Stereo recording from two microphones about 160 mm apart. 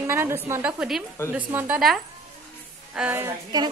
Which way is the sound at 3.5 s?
25° right (ahead or behind).